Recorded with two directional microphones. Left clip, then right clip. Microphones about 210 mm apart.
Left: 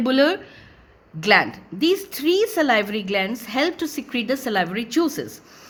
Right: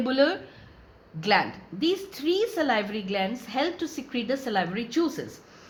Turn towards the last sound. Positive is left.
turn(degrees=50)  # may be behind; listen again after turning